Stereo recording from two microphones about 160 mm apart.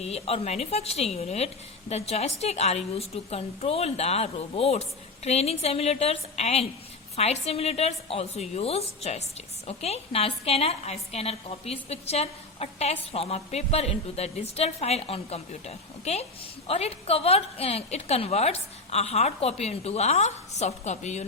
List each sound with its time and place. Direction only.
0.0 s a woman's voice: 40° left (ahead or behind)